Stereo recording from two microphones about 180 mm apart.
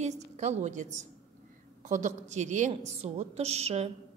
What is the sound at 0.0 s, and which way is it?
A woman's voice, 40° right (ahead or behind).